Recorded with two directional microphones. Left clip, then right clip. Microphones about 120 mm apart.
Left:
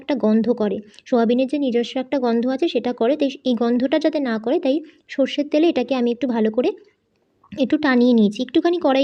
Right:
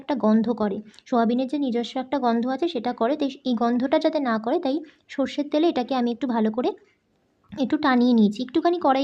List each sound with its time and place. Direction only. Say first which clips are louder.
0.0 s speech: left 3 dB; 20° left (ahead or behind)